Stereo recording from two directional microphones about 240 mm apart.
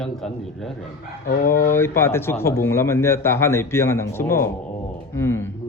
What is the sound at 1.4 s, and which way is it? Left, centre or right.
Speech, left.